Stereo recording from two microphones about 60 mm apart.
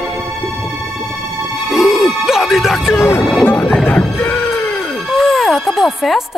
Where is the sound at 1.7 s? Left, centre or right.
Centre.